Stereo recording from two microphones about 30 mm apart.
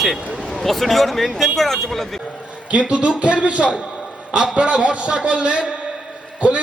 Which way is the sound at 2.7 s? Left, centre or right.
Right.